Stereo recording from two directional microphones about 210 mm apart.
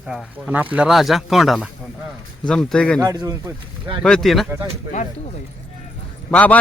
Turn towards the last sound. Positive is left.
turn(degrees=5)  # may be behind; listen again after turning